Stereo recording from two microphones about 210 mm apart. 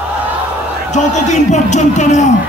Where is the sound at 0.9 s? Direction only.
35° left (ahead or behind).